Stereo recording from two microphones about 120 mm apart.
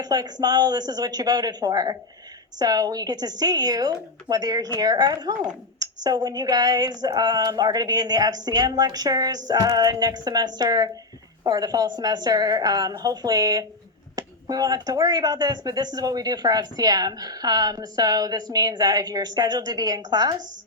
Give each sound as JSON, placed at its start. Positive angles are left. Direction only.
{"t": 0.0, "sound": "speech", "side_deg": -35}